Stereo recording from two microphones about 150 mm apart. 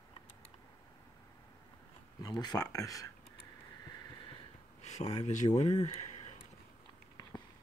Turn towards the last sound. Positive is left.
turn(degrees=50)  # may be behind; listen again after turning